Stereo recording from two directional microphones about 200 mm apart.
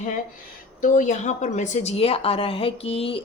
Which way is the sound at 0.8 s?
40° left (ahead or behind).